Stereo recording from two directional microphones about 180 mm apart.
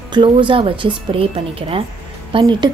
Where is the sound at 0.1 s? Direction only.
25° right (ahead or behind).